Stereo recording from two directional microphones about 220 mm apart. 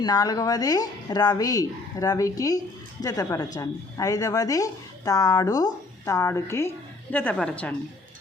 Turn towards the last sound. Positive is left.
turn(degrees=5)  # may be behind; listen again after turning